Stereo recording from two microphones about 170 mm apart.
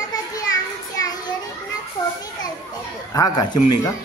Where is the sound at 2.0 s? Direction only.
20° left (ahead or behind).